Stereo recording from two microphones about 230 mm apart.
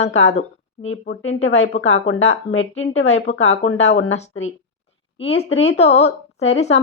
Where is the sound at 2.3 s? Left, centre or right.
Left.